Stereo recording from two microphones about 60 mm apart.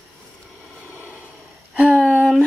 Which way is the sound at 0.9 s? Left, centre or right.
Right.